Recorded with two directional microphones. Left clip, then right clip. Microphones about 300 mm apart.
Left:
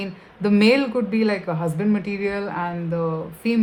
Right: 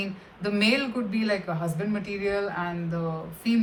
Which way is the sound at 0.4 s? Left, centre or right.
Left.